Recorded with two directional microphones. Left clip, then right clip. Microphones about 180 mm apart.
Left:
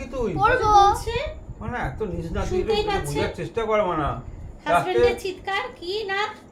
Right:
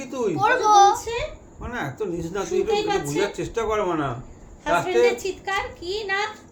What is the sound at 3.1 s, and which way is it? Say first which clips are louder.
Speech: right 1 dB; 55° right (ahead or behind).